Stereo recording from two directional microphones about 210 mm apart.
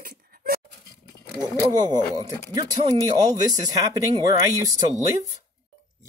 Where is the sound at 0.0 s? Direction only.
45° right (ahead or behind).